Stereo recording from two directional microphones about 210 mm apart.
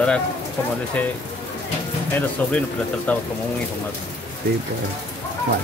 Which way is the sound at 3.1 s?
5° left (ahead or behind).